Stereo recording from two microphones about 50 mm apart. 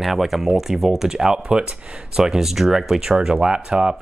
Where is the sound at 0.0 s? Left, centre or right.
Centre.